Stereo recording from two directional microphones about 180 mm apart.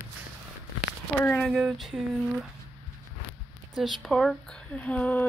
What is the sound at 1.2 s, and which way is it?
Speech, 5° left (ahead or behind).